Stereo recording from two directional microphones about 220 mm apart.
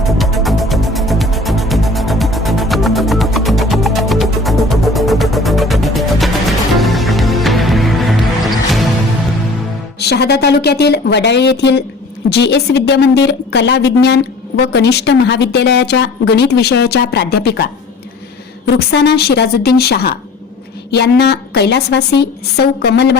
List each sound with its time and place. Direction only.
0.0 s music: centre (ahead or behind)
10.0 s a woman's voice: 50° left (ahead or behind)